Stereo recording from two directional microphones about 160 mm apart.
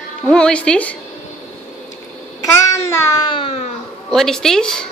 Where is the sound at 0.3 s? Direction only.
5° left (ahead or behind).